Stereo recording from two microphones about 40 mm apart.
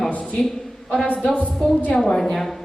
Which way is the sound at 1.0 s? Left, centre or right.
Left.